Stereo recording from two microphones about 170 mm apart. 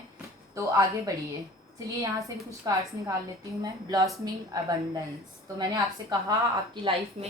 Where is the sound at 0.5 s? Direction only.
20° right (ahead or behind).